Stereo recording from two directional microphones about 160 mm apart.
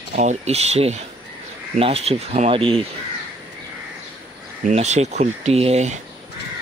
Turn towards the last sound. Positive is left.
turn(degrees=-45)  # may be behind; listen again after turning